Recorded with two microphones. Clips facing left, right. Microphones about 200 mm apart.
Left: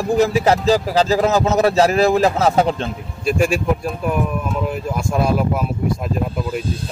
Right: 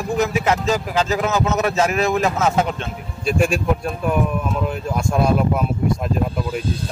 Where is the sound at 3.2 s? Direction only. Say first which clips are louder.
Left 1 dB; centre (ahead or behind).